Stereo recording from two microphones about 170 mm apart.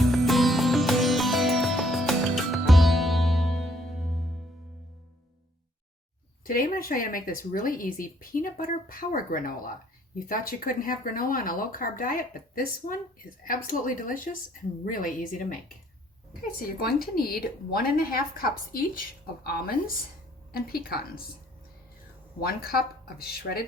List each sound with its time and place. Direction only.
0.1 s music: centre (ahead or behind)
6.4 s a woman's voice: 60° left (ahead or behind)
22.4 s speech: 60° left (ahead or behind)